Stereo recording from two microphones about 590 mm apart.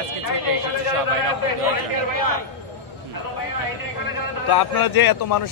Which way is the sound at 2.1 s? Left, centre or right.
Left.